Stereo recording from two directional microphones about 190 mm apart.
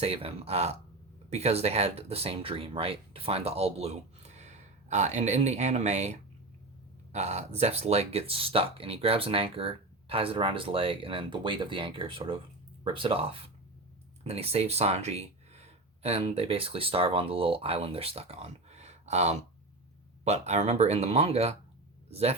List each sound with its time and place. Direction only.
0.0 s speech: 30° right (ahead or behind)